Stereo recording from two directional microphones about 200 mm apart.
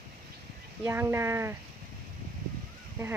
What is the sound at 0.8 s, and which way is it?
Speech, 10° right (ahead or behind).